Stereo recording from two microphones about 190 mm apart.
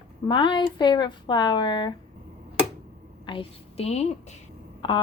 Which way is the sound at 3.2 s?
30° left (ahead or behind).